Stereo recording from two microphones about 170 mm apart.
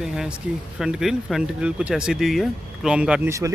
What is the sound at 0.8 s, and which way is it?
Speech, 5° right (ahead or behind).